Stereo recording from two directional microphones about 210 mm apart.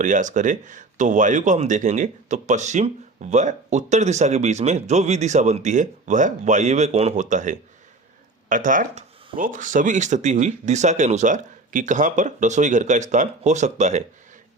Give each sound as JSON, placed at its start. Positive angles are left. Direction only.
{"t": 0.0, "sound": "speech", "side_deg": -35}